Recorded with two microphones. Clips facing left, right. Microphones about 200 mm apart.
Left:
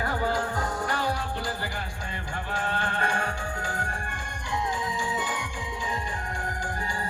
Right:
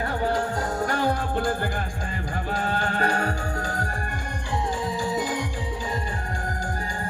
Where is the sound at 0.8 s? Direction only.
50° right (ahead or behind).